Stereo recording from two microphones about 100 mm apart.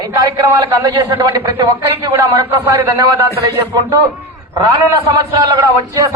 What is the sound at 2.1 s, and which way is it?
A man's voice, 25° right (ahead or behind).